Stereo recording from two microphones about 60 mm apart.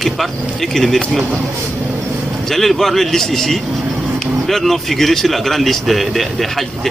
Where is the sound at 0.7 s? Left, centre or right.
Centre.